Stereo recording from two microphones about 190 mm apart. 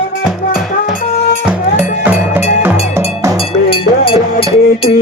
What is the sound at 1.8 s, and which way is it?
Music, 10° right (ahead or behind).